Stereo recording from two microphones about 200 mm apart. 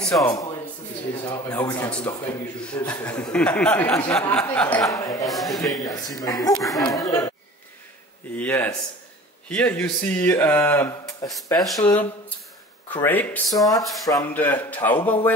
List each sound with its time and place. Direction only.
0.2 s speech: 20° left (ahead or behind)
2.6 s speech: 5° left (ahead or behind)
5.3 s a man's voice: centre (ahead or behind)
5.7 s speech: 20° left (ahead or behind)
6.5 s a man's voice: centre (ahead or behind)
6.8 s speech: 20° left (ahead or behind)
8.4 s speech: 10° left (ahead or behind)
11.6 s a man's voice: centre (ahead or behind)
14.0 s speech: 15° left (ahead or behind)